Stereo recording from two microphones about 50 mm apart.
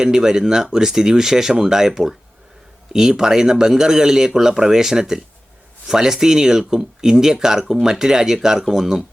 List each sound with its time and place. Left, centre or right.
0.0 s speech: centre